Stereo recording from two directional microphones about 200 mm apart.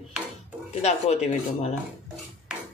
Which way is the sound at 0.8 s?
35° left (ahead or behind).